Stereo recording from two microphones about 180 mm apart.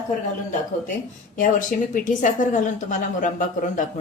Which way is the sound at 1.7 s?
45° left (ahead or behind).